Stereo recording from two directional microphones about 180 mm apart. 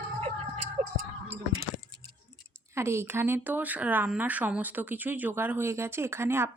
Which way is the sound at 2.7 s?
15° right (ahead or behind).